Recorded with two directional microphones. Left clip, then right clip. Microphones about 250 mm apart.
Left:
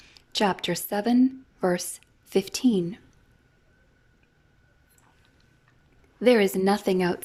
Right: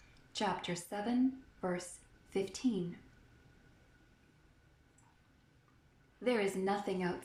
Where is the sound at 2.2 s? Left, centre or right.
Left.